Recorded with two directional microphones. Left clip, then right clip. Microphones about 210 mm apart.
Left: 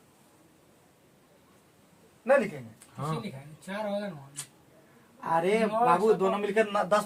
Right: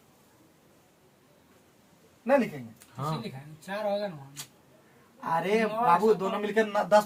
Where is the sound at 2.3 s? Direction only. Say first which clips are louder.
Left 1 dB; 15° left (ahead or behind).